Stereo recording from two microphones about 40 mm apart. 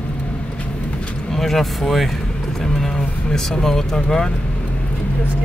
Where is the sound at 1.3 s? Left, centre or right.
Centre.